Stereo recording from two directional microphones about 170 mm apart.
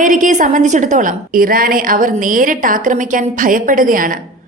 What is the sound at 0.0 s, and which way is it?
A woman's voice, 50° right (ahead or behind).